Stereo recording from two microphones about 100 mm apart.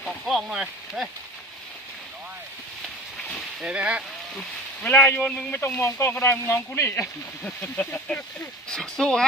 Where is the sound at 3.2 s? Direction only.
10° left (ahead or behind).